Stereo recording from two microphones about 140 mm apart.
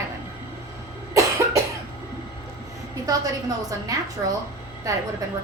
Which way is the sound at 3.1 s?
25° right (ahead or behind).